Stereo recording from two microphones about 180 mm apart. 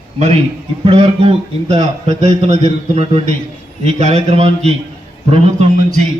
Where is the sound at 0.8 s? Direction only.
30° right (ahead or behind).